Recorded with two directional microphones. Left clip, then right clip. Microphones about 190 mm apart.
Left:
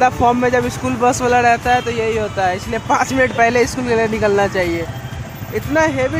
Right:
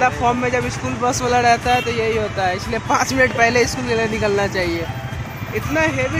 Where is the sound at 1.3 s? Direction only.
15° left (ahead or behind).